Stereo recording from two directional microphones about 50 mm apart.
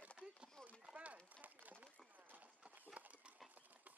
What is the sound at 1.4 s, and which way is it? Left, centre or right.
Run, right.